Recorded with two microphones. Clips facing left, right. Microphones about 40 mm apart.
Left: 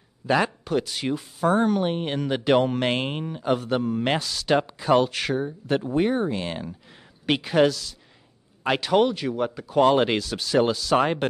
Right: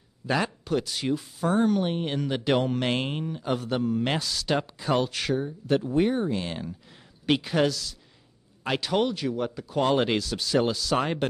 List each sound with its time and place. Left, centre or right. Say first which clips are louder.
0.3 s speech: left 4 dB; left